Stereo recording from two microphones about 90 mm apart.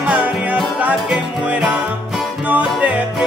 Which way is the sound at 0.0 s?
10° right (ahead or behind).